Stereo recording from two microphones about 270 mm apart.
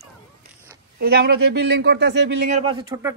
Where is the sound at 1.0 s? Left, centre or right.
Right.